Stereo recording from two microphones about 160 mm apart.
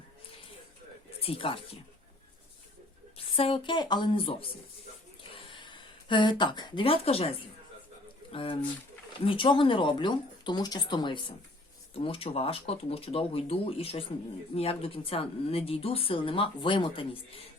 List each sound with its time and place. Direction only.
1.2 s speech: 35° left (ahead or behind)
3.2 s speech: 35° left (ahead or behind)
5.3 s a sound: 30° left (ahead or behind)
8.3 s speech: 35° left (ahead or behind)